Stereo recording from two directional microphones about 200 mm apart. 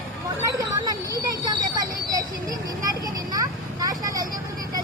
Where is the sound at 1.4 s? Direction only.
20° right (ahead or behind).